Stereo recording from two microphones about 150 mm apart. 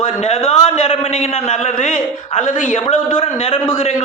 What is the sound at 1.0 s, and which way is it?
A man's voice, 55° left (ahead or behind).